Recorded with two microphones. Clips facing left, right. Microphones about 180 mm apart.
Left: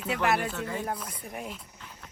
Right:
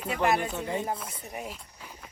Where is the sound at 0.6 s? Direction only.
20° right (ahead or behind).